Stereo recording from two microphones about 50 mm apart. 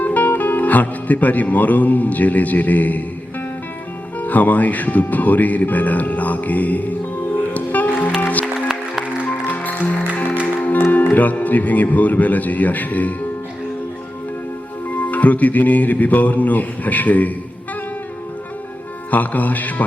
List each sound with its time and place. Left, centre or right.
0.0 s speech: left
4.2 s speech: left
7.5 s music: left
8.6 s music: centre
9.3 s music: left
10.9 s speech: left
14.9 s speech: left
19.1 s speech: left